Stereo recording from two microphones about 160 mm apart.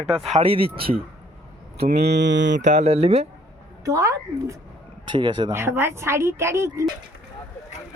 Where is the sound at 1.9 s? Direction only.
90° right.